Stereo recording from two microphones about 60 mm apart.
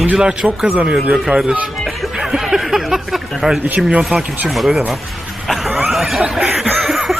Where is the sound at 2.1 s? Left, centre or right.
Centre.